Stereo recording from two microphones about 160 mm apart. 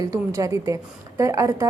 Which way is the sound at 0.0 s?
20° right (ahead or behind).